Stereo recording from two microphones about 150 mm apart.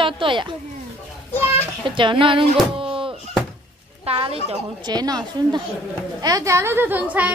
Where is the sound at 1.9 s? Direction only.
35° right (ahead or behind).